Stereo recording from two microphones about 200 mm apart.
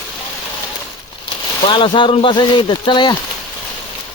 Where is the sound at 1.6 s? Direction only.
25° left (ahead or behind).